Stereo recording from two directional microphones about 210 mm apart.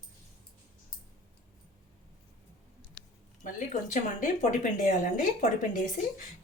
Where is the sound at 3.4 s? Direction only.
40° left (ahead or behind).